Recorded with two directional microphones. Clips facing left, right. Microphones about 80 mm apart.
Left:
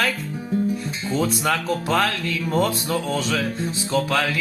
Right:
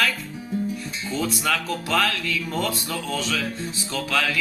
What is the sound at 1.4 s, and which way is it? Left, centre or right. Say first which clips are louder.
Music: left 3 dB; left.